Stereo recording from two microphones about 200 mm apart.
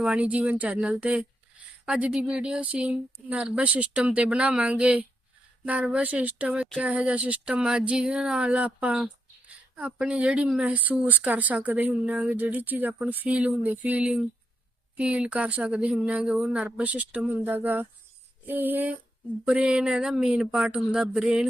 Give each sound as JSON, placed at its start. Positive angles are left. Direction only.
{"t": 0.0, "sound": "a woman's voice", "side_deg": -5}